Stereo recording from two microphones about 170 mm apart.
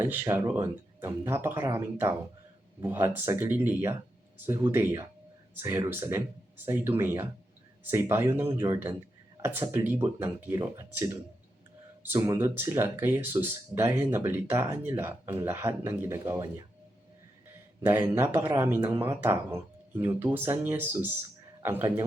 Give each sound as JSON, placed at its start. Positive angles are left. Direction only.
{"t": 0.0, "sound": "speech", "side_deg": -15}
{"t": 17.8, "sound": "speech", "side_deg": -10}